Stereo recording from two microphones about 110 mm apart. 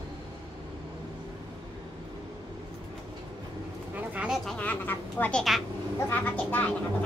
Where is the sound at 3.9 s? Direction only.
15° right (ahead or behind).